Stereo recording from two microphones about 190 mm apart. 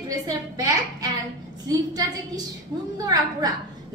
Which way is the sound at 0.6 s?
15° right (ahead or behind).